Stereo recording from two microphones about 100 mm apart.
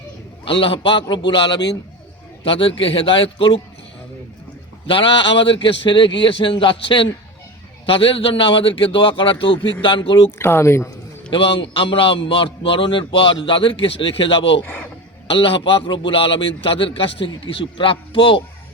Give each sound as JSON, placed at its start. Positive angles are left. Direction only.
{"t": 0.4, "sound": "a man's voice", "side_deg": 65}
{"t": 2.4, "sound": "a man's voice", "side_deg": 65}
{"t": 4.9, "sound": "a man's voice", "side_deg": 60}
{"t": 10.3, "sound": "speech", "side_deg": 25}
{"t": 11.3, "sound": "a man's voice", "side_deg": 60}
{"t": 14.6, "sound": "speech", "side_deg": 15}
{"t": 15.3, "sound": "a man's voice", "side_deg": 60}